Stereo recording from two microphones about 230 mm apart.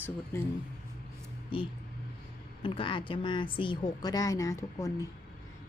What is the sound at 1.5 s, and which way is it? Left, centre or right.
A woman's voice, left.